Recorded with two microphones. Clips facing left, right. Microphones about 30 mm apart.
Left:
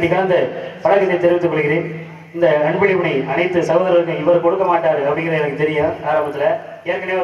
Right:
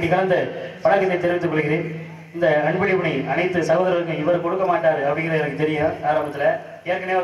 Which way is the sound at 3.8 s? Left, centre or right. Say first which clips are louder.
Left 6 dB; centre.